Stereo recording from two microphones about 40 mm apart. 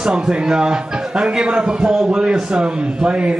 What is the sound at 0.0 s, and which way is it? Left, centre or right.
A man's voice, right.